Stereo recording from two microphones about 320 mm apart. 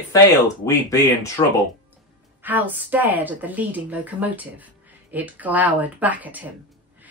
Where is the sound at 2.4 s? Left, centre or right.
Centre.